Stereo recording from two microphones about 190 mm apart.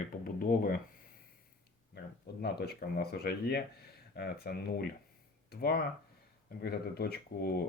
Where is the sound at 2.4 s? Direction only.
55° left (ahead or behind).